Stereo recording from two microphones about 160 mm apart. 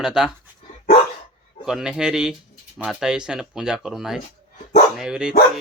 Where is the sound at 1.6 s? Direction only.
5° right (ahead or behind).